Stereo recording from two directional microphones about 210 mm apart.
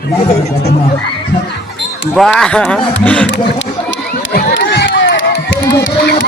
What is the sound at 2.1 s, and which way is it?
Speech, 5° left (ahead or behind).